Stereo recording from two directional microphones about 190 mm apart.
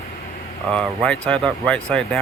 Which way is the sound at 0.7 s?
5° left (ahead or behind).